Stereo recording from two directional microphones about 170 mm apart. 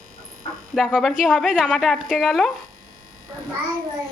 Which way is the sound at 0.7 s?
Centre (ahead or behind).